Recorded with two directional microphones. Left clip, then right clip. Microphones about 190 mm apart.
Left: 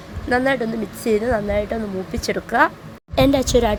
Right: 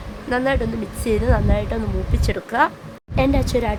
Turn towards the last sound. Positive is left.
turn(degrees=15)  # may be behind; listen again after turning